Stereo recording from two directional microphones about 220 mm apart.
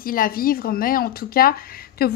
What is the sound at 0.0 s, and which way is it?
Speech, 40° left (ahead or behind).